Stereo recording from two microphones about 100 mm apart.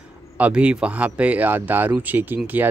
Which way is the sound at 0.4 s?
10° right (ahead or behind).